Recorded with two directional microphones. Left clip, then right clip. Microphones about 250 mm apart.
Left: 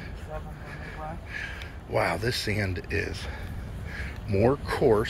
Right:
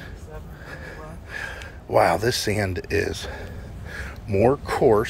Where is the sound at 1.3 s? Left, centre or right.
Centre.